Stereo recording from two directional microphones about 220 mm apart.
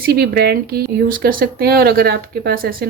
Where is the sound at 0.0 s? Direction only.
45° right (ahead or behind).